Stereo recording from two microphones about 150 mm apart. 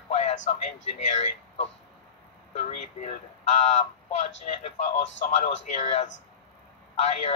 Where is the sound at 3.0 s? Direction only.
50° left (ahead or behind).